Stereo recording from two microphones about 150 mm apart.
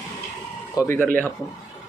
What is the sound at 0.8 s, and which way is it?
Speech, 15° left (ahead or behind).